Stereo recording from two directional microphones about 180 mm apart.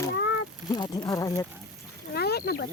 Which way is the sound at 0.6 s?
20° left (ahead or behind).